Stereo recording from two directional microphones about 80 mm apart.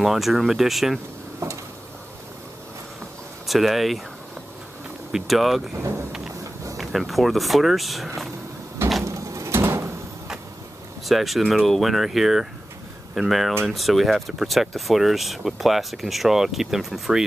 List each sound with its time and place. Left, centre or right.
0.0 s speech: centre
1.4 s a sound: right
3.4 s speech: centre
5.1 s speech: centre
6.8 s speech: centre
9.0 s a sound: right
11.1 s speech: centre